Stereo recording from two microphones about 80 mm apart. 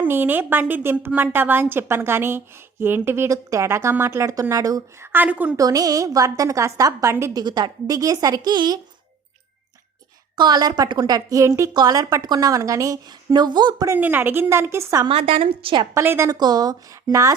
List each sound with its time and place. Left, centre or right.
0.0 s a woman's voice: right
4.9 s a woman's voice: right
5.5 s a woman's voice: right
7.3 s a woman's voice: right
7.9 s a woman's voice: right
10.3 s a woman's voice: right
11.9 s a woman's voice: right
13.1 s a woman's voice: right
13.9 s a woman's voice: right
16.3 s a woman's voice: right